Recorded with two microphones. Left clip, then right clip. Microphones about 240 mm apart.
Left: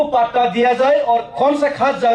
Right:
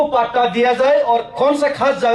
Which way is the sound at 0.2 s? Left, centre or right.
Right.